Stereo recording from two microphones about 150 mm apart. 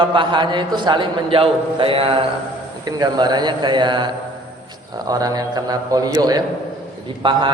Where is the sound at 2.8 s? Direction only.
30° right (ahead or behind).